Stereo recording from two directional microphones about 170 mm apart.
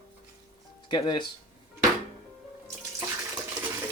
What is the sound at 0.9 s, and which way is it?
Speech, 25° left (ahead or behind).